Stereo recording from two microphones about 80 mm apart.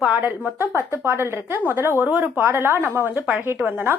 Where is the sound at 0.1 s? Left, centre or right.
Right.